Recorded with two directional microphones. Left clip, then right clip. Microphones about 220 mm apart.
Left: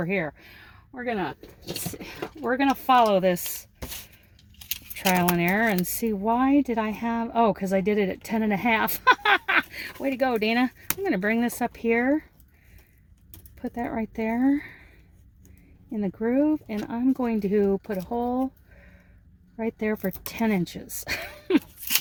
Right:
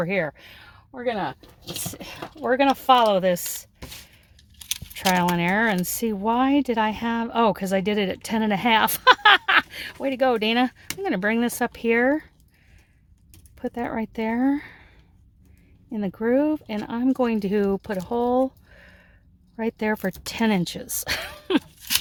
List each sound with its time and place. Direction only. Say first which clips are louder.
0.0 s speech: right 3 dB; 35° right (ahead or behind)
0.9 s speech: right 3 dB; 50° right (ahead or behind)
2.8 s chopping: even; 30° right (ahead or behind)
4.6 s speech: right 3 dB; 30° right (ahead or behind)
13.6 s speech: right 2 dB; 35° right (ahead or behind)
15.9 s speech: right 4 dB; 35° right (ahead or behind)